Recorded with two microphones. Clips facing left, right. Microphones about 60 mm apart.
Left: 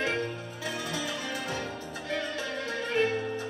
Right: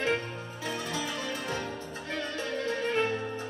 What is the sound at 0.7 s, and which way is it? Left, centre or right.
Music, right.